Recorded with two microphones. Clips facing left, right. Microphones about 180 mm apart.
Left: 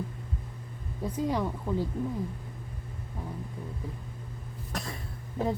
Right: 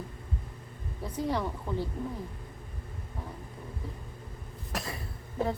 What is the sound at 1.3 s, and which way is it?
Speech, 10° left (ahead or behind).